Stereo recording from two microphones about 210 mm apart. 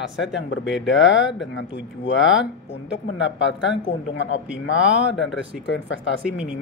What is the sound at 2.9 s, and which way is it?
Speech, 55° left (ahead or behind).